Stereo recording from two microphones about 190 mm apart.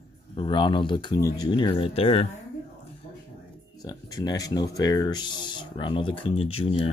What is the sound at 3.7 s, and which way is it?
Speech, 20° left (ahead or behind).